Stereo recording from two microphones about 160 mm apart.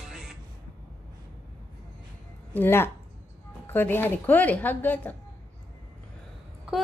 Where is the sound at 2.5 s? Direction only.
15° left (ahead or behind).